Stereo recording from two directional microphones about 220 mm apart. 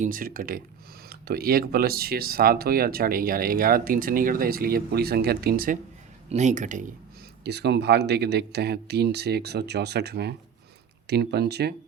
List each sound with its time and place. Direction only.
0.0 s speech: 40° right (ahead or behind)
7.4 s speech: 50° right (ahead or behind)